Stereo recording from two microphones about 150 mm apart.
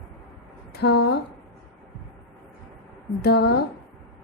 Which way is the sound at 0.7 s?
90° left.